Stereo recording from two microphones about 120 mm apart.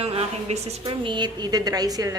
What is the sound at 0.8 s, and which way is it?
A woman's voice, 45° right (ahead or behind).